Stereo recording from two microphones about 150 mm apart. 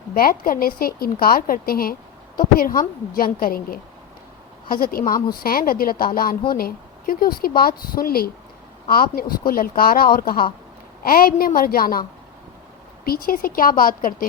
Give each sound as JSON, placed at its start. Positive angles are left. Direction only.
{"t": 0.1, "sound": "speech", "side_deg": 70}
{"t": 13.1, "sound": "speech", "side_deg": 75}